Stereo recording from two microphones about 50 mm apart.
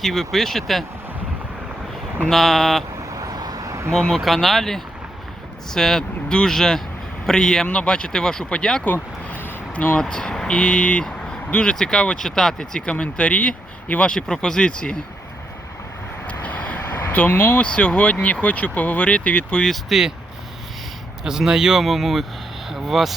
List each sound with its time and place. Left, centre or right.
0.0 s speech: centre
2.3 s speech: centre
3.7 s vehicle: right
3.9 s speech: centre
4.2 s speech: centre
8.8 s vehicle: left
10.0 s speech: centre
14.1 s speech: centre
16.2 s vehicle: left
17.6 s speech: left
19.9 s speech: centre
21.2 s speech: centre